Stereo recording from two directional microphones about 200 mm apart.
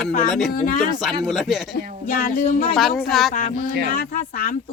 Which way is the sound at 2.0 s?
45° left (ahead or behind).